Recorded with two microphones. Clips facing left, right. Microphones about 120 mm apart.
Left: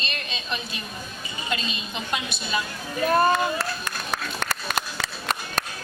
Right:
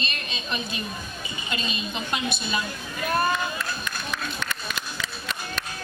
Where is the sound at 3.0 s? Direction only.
35° left (ahead or behind).